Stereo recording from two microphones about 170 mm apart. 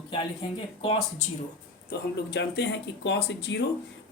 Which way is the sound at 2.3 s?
90° left.